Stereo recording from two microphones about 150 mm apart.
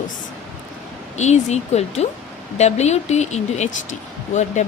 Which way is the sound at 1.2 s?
50° left (ahead or behind).